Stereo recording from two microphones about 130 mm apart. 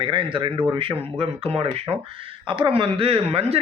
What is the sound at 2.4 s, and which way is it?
A man's voice, 40° right (ahead or behind).